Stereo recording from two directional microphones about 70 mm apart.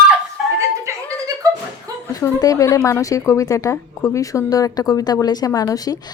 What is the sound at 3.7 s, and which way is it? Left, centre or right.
Speech, left.